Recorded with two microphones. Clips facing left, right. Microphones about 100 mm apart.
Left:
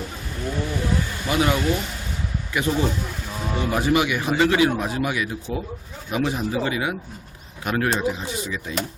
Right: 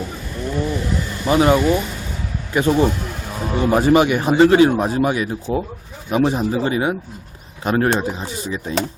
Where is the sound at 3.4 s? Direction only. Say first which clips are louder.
Right 7 dB; 40° right (ahead or behind).